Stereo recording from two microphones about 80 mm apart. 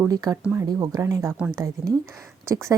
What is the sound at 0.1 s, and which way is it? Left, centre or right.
Speech, right.